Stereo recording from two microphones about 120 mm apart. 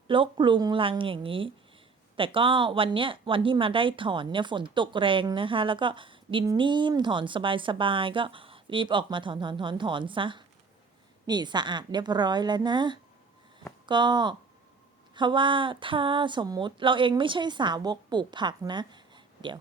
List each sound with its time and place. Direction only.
0.1 s speech: 45° right (ahead or behind)